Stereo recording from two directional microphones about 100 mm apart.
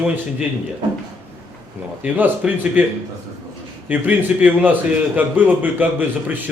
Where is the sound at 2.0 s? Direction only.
15° right (ahead or behind).